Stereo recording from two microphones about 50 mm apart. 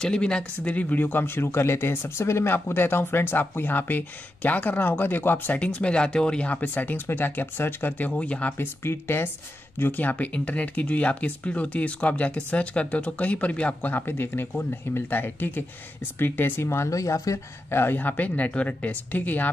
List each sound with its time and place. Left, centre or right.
0.0 s speech: centre
0.7 s speech: left
2.5 s speech: left
5.7 s speech: centre; by 8.2 s left
8.2 s speech: left
8.5 s speech: left
9.8 s speech: left
13.9 s speech: left
16.6 s speech: left
17.6 s speech: left
17.9 s speech: left